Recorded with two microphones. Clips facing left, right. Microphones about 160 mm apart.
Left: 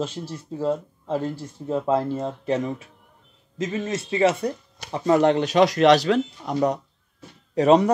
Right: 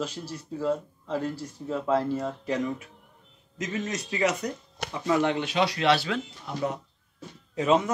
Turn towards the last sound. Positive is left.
turn(degrees=35)  # may be behind; listen again after turning